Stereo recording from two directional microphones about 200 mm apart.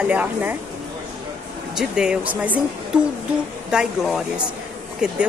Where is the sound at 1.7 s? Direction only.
5° right (ahead or behind).